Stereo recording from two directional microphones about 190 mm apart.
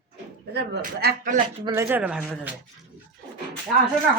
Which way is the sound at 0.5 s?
60° right (ahead or behind).